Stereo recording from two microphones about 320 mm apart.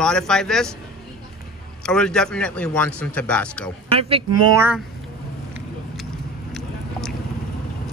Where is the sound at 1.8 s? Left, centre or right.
Centre.